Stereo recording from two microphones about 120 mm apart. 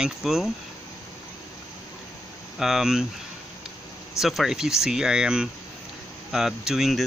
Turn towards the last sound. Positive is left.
turn(degrees=0)  # may be behind; listen again after turning